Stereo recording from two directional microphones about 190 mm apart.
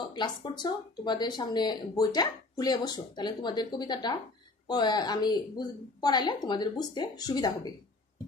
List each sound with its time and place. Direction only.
0.1 s speech: 25° left (ahead or behind)